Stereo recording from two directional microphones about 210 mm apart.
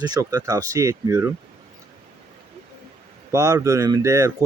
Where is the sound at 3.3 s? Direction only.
15° right (ahead or behind).